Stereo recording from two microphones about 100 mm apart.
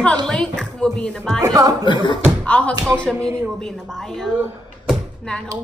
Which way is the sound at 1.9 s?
50° left (ahead or behind).